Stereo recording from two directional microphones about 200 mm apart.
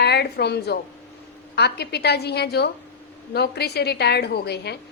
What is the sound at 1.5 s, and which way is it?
A woman's voice, 55° left (ahead or behind).